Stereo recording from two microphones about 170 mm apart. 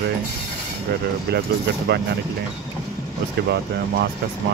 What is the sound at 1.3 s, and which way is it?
Speech, 70° right (ahead or behind).